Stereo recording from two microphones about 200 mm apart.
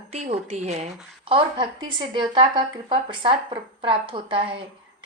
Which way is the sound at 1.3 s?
25° right (ahead or behind).